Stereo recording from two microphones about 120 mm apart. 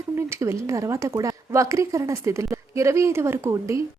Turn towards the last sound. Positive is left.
turn(degrees=-25)  # may be behind; listen again after turning